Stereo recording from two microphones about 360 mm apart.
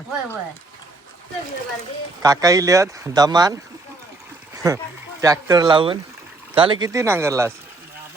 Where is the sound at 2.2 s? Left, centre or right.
Centre.